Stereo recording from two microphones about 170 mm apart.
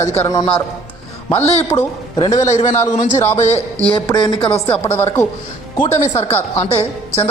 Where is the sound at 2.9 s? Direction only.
45° left (ahead or behind).